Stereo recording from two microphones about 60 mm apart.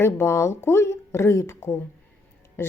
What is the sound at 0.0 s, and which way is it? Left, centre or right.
A woman's voice, left.